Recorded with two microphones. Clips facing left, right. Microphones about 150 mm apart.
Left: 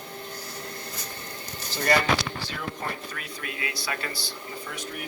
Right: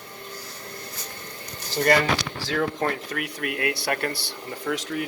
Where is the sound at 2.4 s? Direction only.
80° right.